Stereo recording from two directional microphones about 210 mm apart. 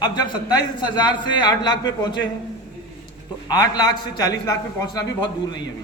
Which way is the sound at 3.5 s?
20° left (ahead or behind).